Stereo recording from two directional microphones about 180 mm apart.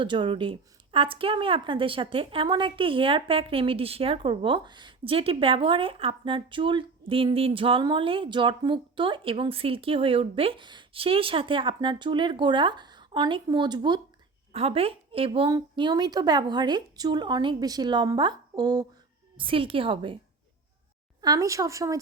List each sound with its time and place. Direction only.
0.0 s a woman's voice: 25° right (ahead or behind)
21.2 s speech: 20° right (ahead or behind)